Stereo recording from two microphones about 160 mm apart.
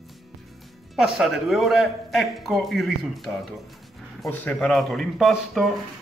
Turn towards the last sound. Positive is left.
turn(degrees=0)  # may be behind; listen again after turning